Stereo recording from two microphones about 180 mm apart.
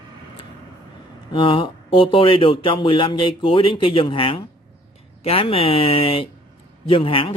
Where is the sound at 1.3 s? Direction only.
30° left (ahead or behind).